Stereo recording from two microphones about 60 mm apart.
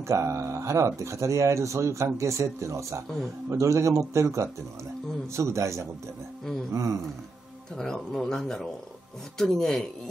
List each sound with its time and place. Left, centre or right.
0.0 s a man's voice: right
7.7 s speech: centre